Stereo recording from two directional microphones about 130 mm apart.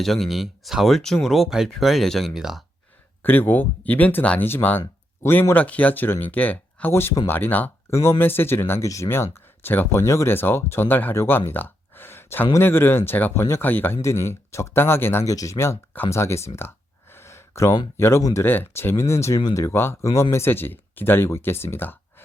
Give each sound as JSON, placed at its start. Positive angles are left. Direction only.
{"t": 0.0, "sound": "speech", "side_deg": 0}
{"t": 3.2, "sound": "speech", "side_deg": 15}
{"t": 16.6, "sound": "a sound", "side_deg": 20}
{"t": 17.9, "sound": "speech", "side_deg": 20}